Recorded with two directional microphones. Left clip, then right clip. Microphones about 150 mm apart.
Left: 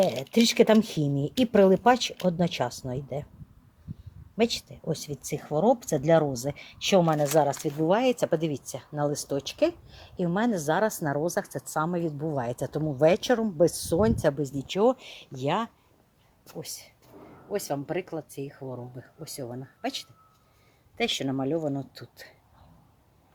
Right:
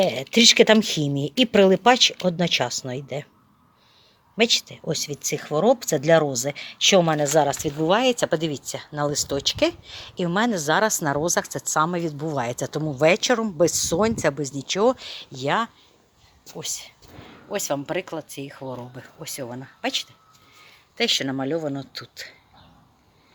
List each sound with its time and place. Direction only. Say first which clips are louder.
0.0 s speech: right 7 dB; 5° left (ahead or behind)
4.4 s speech: right 7 dB; centre (ahead or behind)
16.5 s speech: right 7 dB; centre (ahead or behind)
18.6 s speech: right 5 dB; 20° right (ahead or behind)
18.9 s speech: right 5 dB; 5° right (ahead or behind)
21.8 s speech: right 5 dB; 15° left (ahead or behind)